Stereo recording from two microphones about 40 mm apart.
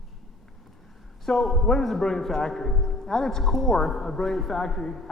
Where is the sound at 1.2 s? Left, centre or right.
Centre.